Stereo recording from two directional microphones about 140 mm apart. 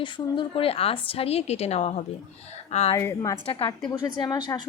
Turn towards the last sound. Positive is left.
turn(degrees=30)  # may be behind; listen again after turning